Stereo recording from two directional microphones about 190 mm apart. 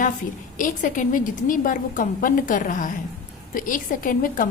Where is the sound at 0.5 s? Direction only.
45° left (ahead or behind).